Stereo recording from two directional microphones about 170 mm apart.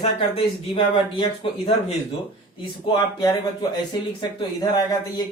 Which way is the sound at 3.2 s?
20° left (ahead or behind).